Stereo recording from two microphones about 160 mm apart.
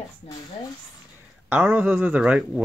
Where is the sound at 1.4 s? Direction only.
10° right (ahead or behind).